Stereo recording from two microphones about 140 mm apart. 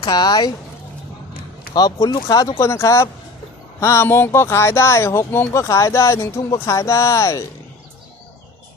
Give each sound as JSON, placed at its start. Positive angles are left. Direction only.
{"t": 0.0, "sound": "speech", "side_deg": 25}
{"t": 1.7, "sound": "speech", "side_deg": 30}